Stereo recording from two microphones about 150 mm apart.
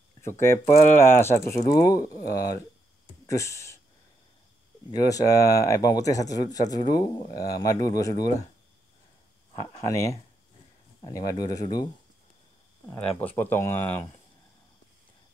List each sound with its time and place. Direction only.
0.2 s speech: 20° left (ahead or behind)
4.9 s speech: 25° left (ahead or behind)
9.5 s speech: 30° left (ahead or behind)
13.2 s speech: 15° left (ahead or behind)